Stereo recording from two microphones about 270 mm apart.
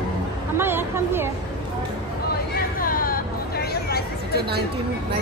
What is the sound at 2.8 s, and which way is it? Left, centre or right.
Hubbub, left.